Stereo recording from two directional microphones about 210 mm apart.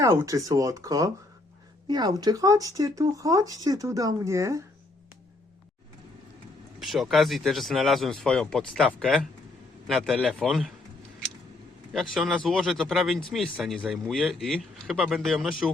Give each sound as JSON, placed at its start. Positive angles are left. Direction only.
{"t": 0.0, "sound": "speech", "side_deg": -15}
{"t": 6.7, "sound": "speech", "side_deg": 0}
{"t": 11.9, "sound": "speech", "side_deg": 0}